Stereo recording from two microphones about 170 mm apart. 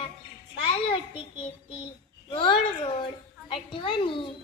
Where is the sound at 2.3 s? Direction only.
30° left (ahead or behind).